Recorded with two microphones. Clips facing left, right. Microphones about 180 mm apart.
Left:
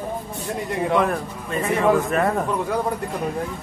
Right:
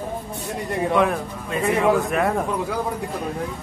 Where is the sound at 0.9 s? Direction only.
Centre (ahead or behind).